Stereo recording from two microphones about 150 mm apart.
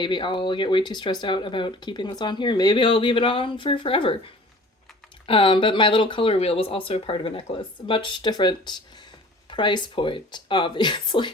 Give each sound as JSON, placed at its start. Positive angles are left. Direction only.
{"t": 0.0, "sound": "speech", "side_deg": 30}